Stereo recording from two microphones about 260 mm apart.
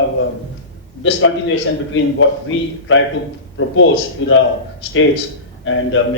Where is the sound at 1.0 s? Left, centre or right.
Left.